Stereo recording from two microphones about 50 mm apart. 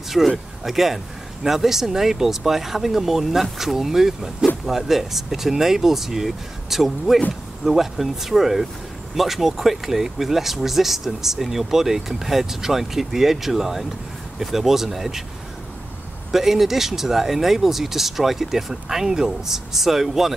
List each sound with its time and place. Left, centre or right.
0.2 s speech: centre
16.3 s speech: centre